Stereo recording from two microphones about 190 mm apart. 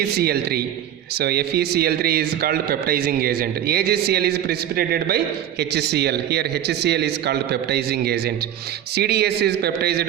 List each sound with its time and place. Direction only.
0.2 s a man's voice: 55° right (ahead or behind)